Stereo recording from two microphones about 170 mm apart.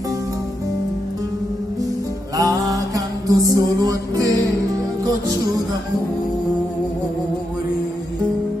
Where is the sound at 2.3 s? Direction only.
20° right (ahead or behind).